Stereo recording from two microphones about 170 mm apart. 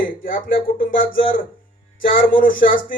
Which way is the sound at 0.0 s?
55° left (ahead or behind).